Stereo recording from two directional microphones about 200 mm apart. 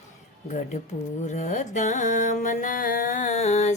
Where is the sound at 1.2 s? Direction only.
35° left (ahead or behind).